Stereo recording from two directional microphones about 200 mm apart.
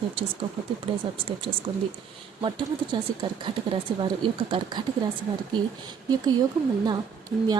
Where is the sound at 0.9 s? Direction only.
25° right (ahead or behind).